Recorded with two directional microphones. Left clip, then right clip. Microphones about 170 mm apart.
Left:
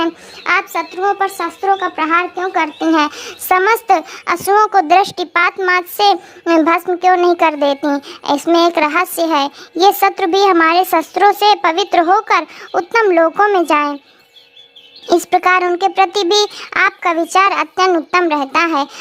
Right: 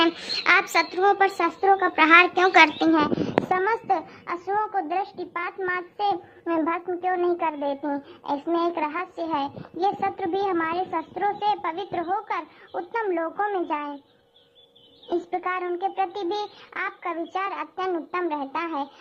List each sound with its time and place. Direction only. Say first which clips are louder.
0.0 s speech: left 3 dB; 20° left (ahead or behind)
2.9 s a child's voice: left 6 dB; 35° left (ahead or behind); by 13.9 s 60° left (ahead or behind)
15.0 s a child's voice: left 15 dB; 55° left (ahead or behind)